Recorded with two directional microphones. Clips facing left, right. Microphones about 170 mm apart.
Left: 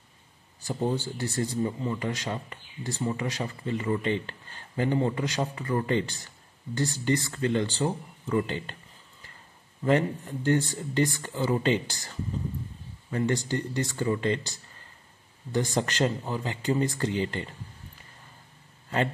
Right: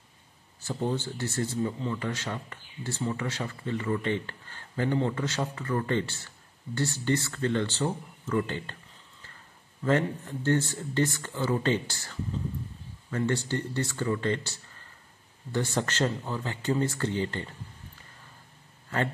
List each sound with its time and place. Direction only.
0.6 s a man's voice: 15° left (ahead or behind)
9.8 s a man's voice: 15° left (ahead or behind)